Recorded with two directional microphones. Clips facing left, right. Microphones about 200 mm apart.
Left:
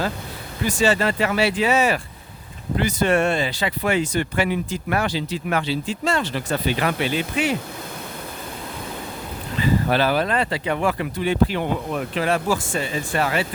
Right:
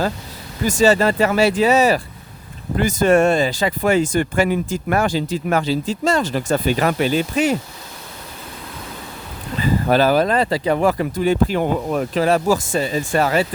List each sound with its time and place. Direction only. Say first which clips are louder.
0.6 s speech: right 5 dB; 40° right (ahead or behind)
9.6 s speech: right 3 dB; 40° right (ahead or behind)